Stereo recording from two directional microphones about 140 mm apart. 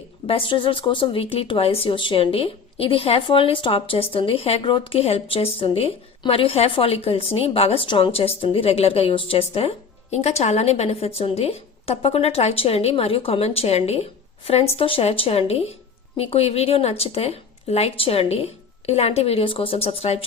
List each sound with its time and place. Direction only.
0.3 s speech: 40° left (ahead or behind)